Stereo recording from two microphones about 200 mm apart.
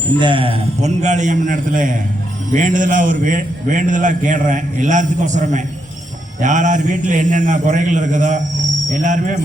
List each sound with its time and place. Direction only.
0.2 s a man's voice: 25° right (ahead or behind)